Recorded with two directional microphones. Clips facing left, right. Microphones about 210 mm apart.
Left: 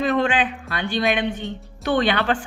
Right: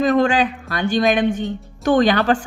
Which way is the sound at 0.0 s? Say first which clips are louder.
Right 4 dB; 40° right (ahead or behind).